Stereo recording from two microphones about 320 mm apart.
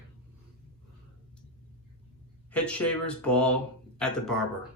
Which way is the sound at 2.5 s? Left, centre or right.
Centre.